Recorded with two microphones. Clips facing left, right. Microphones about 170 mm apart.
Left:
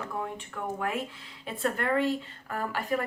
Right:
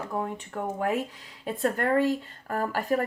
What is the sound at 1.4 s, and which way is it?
Speech, 40° right (ahead or behind).